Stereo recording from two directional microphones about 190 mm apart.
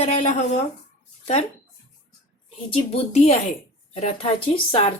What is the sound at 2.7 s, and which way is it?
Speech, 35° left (ahead or behind).